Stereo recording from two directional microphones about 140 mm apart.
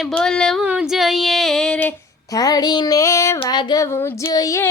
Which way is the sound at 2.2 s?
25° left (ahead or behind).